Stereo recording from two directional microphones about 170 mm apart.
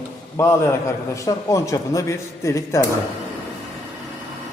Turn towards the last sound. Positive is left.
turn(degrees=15)  # may be behind; listen again after turning